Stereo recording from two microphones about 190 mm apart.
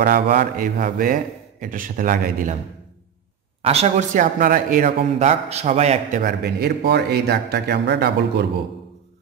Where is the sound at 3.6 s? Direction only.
35° right (ahead or behind); by 8.5 s 60° right (ahead or behind).